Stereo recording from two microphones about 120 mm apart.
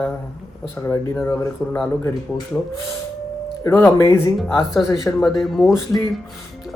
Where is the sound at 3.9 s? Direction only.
20° left (ahead or behind).